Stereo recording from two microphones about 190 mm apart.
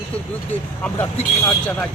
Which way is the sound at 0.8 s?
5° left (ahead or behind).